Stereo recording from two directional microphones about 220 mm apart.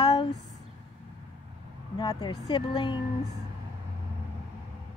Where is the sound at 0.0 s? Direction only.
20° left (ahead or behind).